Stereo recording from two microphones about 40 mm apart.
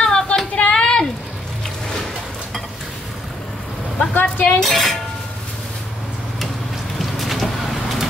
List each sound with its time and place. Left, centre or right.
0.0 s a sound: left
4.1 s vehicle: left
4.6 s dishes: centre
7.0 s vehicle: centre